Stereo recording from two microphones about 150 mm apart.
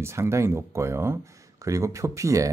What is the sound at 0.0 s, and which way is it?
Speech, 20° right (ahead or behind).